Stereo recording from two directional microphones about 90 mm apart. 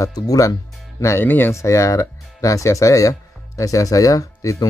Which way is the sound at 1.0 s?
25° left (ahead or behind).